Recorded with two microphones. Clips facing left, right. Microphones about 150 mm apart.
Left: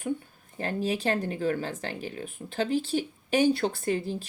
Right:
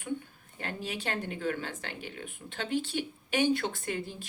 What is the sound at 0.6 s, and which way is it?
A woman's voice, 40° left (ahead or behind).